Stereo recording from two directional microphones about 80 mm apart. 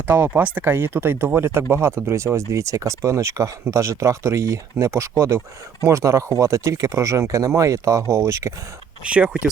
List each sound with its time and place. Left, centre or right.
0.1 s speech: right
9.0 s speech: centre